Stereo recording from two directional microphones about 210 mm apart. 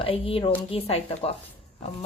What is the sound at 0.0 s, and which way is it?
A woman's voice, 25° left (ahead or behind).